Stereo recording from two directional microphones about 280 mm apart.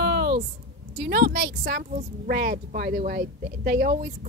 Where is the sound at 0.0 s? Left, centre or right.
Right.